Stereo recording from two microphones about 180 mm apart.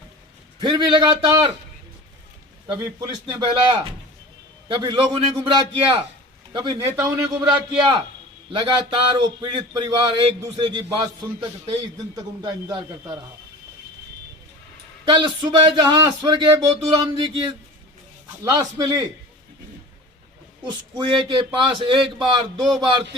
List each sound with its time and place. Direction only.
0.6 s speech: 25° right (ahead or behind)
2.6 s speech: 25° right (ahead or behind)
15.0 s speech: 25° right (ahead or behind)
20.9 s speech: 25° right (ahead or behind)